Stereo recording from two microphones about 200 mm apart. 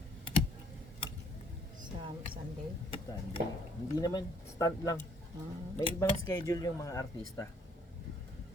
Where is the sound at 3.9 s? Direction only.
20° left (ahead or behind).